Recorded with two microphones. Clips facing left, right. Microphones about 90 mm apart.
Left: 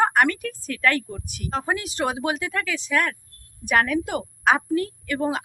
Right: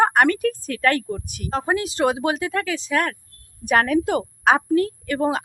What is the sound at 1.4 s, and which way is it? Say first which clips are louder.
A woman's voice: right 3 dB; 30° right (ahead or behind).